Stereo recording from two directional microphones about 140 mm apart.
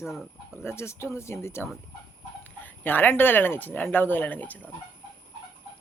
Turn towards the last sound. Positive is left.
turn(degrees=10)  # may be behind; listen again after turning